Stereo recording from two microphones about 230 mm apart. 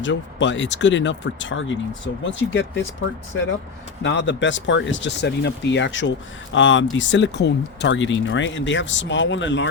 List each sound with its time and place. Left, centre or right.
0.0 s speech: left
4.0 s speech: left